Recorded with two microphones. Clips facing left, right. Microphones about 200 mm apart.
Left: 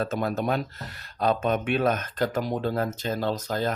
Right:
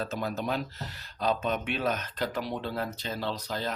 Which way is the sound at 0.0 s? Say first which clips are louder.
Left 5 dB; 55° left (ahead or behind).